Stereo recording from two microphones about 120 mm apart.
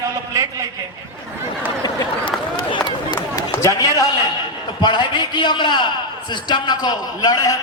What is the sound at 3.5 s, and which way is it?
A man's voice, 25° left (ahead or behind).